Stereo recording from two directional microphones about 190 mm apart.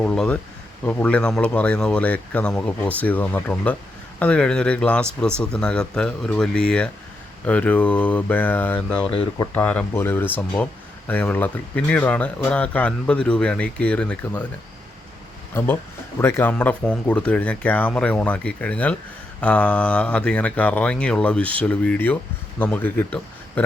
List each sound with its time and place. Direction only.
0.0 s speech: 5° left (ahead or behind)
15.5 s speech: 10° left (ahead or behind)